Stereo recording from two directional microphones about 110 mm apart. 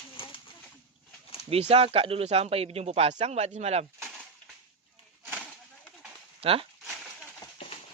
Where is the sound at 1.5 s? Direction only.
65° right (ahead or behind).